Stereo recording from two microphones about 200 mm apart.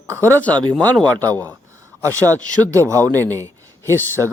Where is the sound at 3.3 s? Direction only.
15° right (ahead or behind).